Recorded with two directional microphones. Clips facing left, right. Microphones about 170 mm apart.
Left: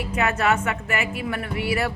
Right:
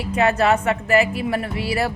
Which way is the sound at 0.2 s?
30° right (ahead or behind).